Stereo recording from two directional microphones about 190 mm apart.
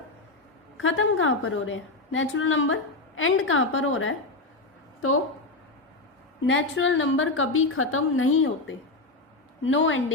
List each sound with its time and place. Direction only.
0.8 s a woman's voice: 90° left
6.4 s a woman's voice: 85° left